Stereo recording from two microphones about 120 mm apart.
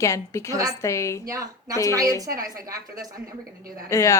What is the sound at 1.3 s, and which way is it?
A woman's voice, 30° right (ahead or behind).